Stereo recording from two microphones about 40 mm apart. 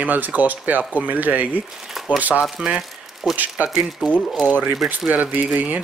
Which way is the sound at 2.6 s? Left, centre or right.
Right.